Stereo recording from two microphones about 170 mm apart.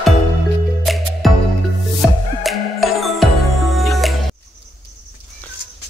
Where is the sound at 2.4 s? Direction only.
Centre (ahead or behind).